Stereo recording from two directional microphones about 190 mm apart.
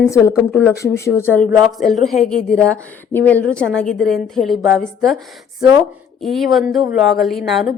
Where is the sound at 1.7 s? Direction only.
Centre (ahead or behind).